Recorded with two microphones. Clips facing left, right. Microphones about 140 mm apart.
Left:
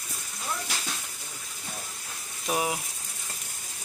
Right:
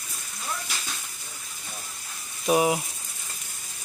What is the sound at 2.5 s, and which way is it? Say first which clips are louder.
Speech: right 7 dB; 15° right (ahead or behind).